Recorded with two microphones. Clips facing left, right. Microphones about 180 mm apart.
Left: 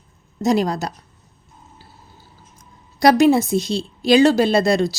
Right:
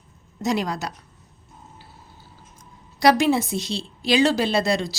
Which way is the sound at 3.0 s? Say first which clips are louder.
Left 5 dB; 45° left (ahead or behind).